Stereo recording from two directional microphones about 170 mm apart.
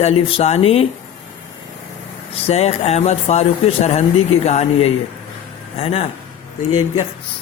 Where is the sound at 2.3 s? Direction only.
35° left (ahead or behind).